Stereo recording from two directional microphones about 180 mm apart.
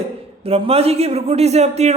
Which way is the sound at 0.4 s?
35° right (ahead or behind).